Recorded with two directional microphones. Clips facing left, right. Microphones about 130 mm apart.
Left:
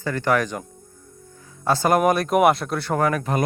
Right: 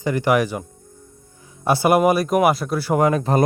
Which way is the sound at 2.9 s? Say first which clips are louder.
Right 4 dB; 20° right (ahead or behind).